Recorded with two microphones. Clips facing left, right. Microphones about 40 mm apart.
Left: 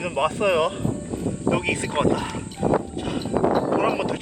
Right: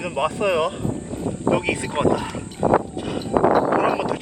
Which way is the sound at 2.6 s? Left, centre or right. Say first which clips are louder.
Right 4 dB; centre.